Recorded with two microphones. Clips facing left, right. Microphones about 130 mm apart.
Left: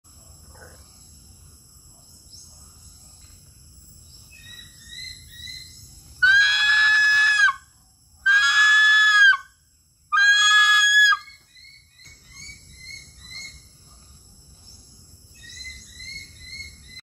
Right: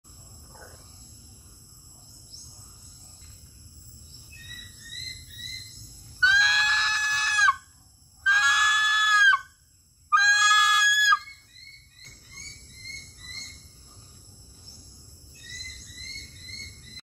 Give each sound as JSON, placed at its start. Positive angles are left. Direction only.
{"t": 6.1, "sound": "fowl", "side_deg": -35}
{"t": 8.2, "sound": "a sound", "side_deg": -35}
{"t": 10.1, "sound": "goat", "side_deg": -35}